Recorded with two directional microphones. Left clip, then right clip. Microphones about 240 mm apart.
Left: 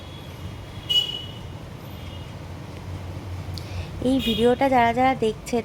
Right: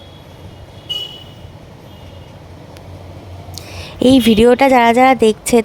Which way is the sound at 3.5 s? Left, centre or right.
Right.